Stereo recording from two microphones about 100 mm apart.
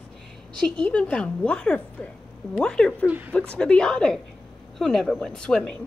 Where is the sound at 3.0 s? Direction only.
20° right (ahead or behind).